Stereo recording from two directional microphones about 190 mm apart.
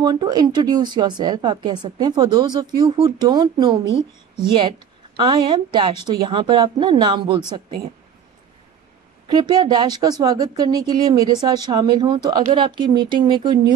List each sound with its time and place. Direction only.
0.0 s speech: 20° right (ahead or behind)
9.3 s speech: 20° right (ahead or behind)